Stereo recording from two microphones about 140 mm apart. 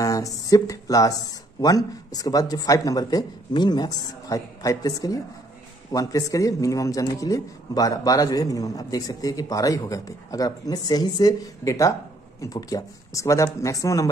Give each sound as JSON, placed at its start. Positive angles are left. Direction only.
{"t": 0.0, "sound": "a man's voice", "side_deg": 25}